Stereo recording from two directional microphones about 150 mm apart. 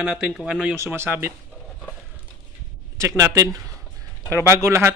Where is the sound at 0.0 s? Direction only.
5° right (ahead or behind).